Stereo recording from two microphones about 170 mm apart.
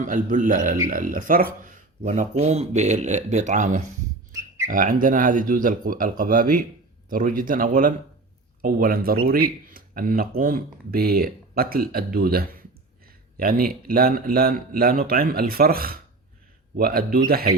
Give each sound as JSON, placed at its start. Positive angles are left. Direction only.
{"t": 0.0, "sound": "speech", "side_deg": -50}